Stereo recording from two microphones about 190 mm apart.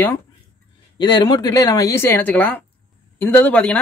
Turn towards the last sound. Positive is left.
turn(degrees=5)  # may be behind; listen again after turning